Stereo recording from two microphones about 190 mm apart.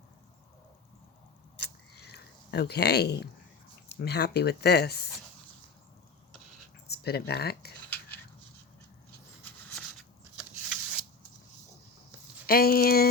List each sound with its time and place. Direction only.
2.0 s a sound: 60° left (ahead or behind)
3.8 s speech: 60° left (ahead or behind)
6.8 s speech: 55° left (ahead or behind)
7.9 s a sound: 10° left (ahead or behind)
10.7 s shuffling cards: 5° right (ahead or behind)
12.5 s speech: 50° left (ahead or behind)